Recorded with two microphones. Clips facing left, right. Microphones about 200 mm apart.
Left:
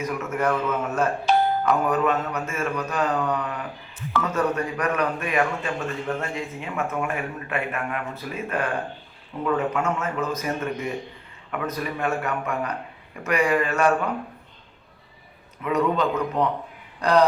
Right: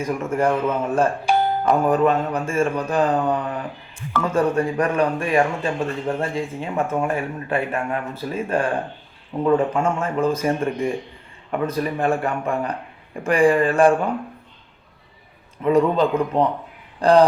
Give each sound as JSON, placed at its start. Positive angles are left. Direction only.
{"t": 0.0, "sound": "speech", "side_deg": -30}
{"t": 1.3, "sound": "doorbell", "side_deg": -10}
{"t": 1.6, "sound": "speech", "side_deg": -30}
{"t": 15.6, "sound": "speech", "side_deg": -30}